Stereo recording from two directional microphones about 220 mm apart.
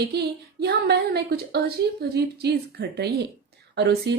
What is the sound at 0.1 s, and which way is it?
Speech, 45° right (ahead or behind).